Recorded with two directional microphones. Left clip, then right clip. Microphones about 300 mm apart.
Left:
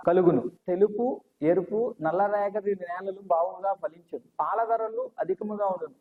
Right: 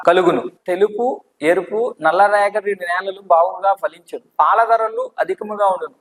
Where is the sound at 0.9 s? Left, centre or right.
Right.